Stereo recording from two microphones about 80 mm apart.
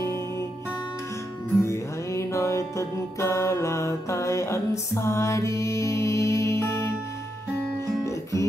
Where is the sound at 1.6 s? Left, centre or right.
Left.